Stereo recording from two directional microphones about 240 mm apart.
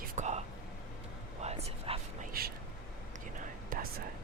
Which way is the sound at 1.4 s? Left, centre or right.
Right.